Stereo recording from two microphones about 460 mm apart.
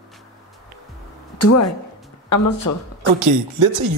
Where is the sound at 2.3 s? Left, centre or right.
Left.